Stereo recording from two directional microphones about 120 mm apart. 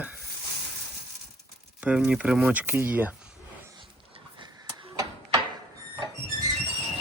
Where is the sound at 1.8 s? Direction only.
10° right (ahead or behind).